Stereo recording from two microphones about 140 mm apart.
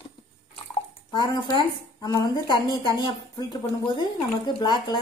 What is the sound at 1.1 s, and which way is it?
A woman's voice, 30° left (ahead or behind).